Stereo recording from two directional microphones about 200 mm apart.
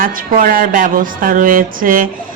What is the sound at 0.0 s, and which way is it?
Speech, 45° right (ahead or behind).